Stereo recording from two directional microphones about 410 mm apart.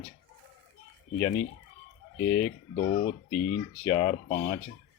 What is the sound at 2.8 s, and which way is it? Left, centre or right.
Speech, centre.